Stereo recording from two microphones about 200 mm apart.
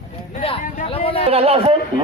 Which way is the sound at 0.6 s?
40° left (ahead or behind).